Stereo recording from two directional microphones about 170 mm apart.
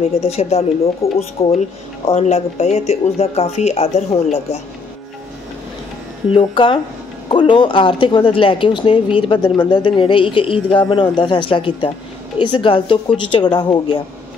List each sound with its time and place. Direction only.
0.0 s speech: 35° left (ahead or behind)
1.0 s speech: 15° left (ahead or behind)
1.5 s speech: 35° left (ahead or behind)
6.3 s speech: 30° left (ahead or behind)